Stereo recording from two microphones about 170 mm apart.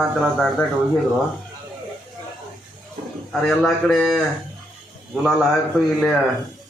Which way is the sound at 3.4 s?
Centre (ahead or behind).